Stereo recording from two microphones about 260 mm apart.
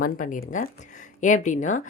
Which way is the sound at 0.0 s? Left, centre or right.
Left.